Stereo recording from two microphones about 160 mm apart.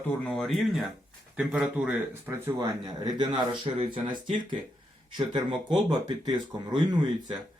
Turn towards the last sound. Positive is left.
turn(degrees=-30)  # may be behind; listen again after turning